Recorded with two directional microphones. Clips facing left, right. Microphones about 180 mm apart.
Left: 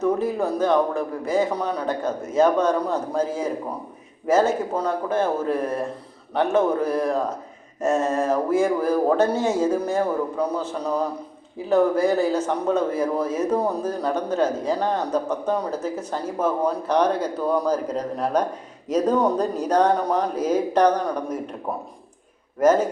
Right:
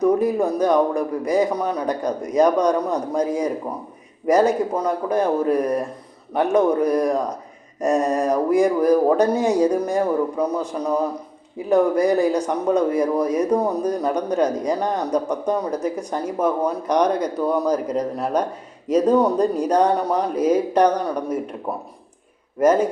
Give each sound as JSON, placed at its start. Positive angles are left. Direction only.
{"t": 0.0, "sound": "speech", "side_deg": -15}